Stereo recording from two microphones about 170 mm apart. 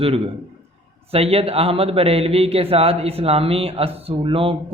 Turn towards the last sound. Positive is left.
turn(degrees=-30)  # may be behind; listen again after turning